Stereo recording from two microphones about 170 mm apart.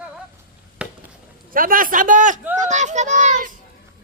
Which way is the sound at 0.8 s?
5° right (ahead or behind).